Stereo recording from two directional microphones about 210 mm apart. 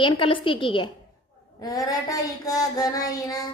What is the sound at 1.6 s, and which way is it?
Child singing, 15° left (ahead or behind).